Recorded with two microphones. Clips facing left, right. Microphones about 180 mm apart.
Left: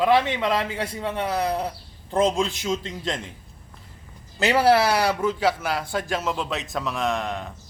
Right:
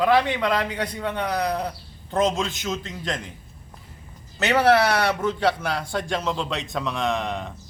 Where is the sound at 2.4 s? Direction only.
30° left (ahead or behind).